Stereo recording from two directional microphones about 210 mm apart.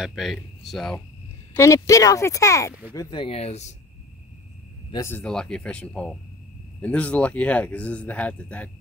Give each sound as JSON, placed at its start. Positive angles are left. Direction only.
{"t": 0.0, "sound": "speech", "side_deg": 0}
{"t": 1.6, "sound": "speech", "side_deg": 15}
{"t": 4.9, "sound": "speech", "side_deg": 10}